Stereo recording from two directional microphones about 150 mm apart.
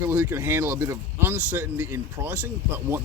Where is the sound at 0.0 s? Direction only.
15° right (ahead or behind).